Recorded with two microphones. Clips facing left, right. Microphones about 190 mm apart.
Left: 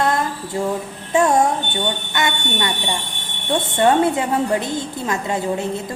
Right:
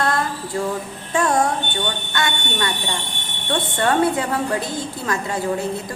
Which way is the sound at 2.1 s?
20° left (ahead or behind).